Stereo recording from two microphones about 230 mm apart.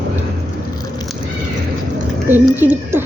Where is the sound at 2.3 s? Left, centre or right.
Centre.